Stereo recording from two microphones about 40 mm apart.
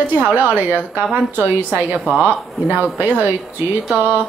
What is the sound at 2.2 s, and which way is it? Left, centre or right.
A woman's voice, right.